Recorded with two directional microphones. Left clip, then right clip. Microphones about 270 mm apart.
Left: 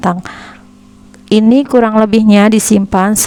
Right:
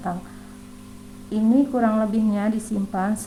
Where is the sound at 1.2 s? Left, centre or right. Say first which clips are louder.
Left 11 dB; left.